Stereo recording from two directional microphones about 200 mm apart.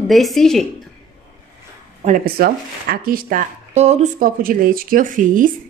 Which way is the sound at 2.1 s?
50° right (ahead or behind).